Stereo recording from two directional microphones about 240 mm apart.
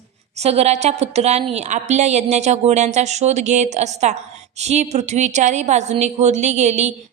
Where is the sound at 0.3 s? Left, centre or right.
Right.